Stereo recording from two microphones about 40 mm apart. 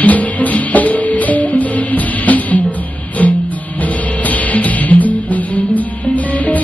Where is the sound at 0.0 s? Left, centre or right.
Left.